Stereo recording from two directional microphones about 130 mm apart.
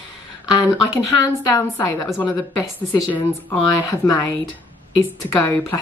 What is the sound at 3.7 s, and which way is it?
A woman's voice, 25° left (ahead or behind).